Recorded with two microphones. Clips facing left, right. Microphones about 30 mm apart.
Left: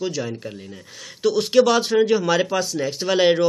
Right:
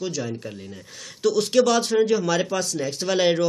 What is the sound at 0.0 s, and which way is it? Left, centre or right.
Speech, centre.